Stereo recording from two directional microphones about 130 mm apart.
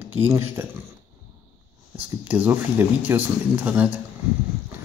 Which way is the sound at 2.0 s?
15° right (ahead or behind).